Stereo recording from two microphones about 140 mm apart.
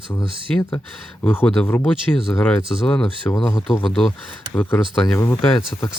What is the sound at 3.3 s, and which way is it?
Speech, 20° left (ahead or behind).